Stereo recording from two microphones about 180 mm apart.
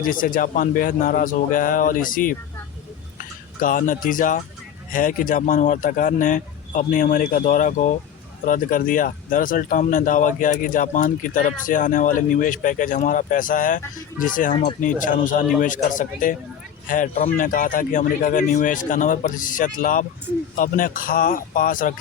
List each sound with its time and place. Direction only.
0.0 s speech: 50° left (ahead or behind)
3.6 s speech: 50° left (ahead or behind)
14.5 s speech: 30° left (ahead or behind)
14.8 s speech: 45° left (ahead or behind)